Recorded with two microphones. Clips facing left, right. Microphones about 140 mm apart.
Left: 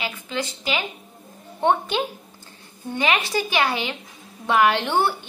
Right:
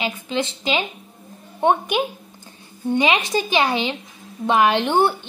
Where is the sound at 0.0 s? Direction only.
20° right (ahead or behind).